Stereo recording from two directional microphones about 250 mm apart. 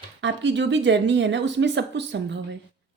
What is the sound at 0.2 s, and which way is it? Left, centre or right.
A woman's voice, right.